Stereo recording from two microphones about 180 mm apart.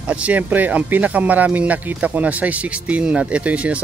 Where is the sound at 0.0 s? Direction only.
5° right (ahead or behind).